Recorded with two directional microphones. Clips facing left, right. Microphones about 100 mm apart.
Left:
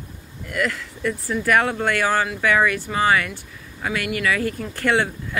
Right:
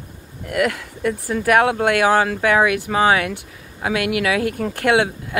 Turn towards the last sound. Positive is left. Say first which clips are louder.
# right 4 dB
turn(degrees=-55)  # may be behind; listen again after turning